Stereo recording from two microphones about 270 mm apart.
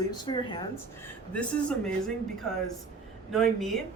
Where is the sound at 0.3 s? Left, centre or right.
Centre.